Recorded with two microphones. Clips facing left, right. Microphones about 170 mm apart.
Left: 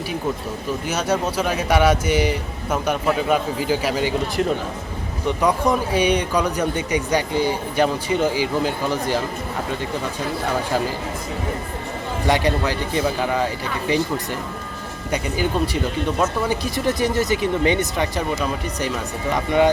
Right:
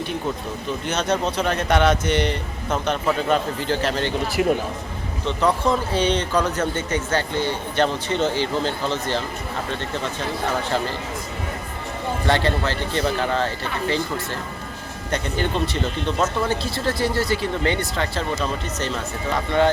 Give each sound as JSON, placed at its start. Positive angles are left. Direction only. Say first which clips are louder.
{"t": 0.9, "sound": "speech", "louder": "even", "side_deg": 10}
{"t": 4.4, "sound": "speech", "louder": "right 2 dB", "side_deg": -5}
{"t": 5.2, "sound": "speech", "louder": "left 1 dB", "side_deg": 15}
{"t": 12.3, "sound": "speech", "louder": "left 2 dB", "side_deg": 15}
{"t": 15.1, "sound": "speech", "louder": "left 2 dB", "side_deg": 10}